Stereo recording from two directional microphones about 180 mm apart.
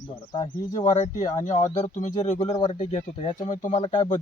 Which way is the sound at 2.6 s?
25° left (ahead or behind).